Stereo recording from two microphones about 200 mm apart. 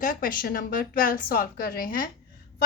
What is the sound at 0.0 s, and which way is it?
A woman's voice, 45° left (ahead or behind).